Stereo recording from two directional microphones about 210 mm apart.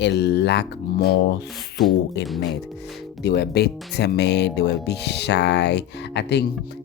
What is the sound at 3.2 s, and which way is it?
Speech, 50° left (ahead or behind).